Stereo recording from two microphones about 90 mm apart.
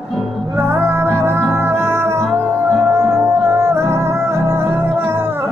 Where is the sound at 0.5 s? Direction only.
30° right (ahead or behind).